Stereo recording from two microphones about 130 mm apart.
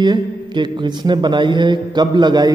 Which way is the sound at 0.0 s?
35° right (ahead or behind).